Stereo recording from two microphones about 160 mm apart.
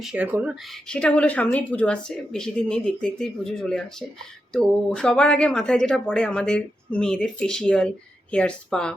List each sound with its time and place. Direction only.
0.0 s a woman's voice: 5° right (ahead or behind)